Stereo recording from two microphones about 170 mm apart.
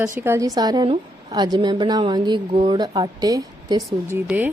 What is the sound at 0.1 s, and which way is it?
Speech, 15° right (ahead or behind).